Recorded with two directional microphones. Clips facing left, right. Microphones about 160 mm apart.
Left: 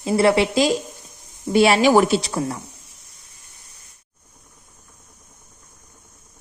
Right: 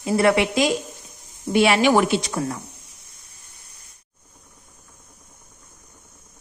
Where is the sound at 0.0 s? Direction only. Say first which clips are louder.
Left 1 dB; 30° left (ahead or behind).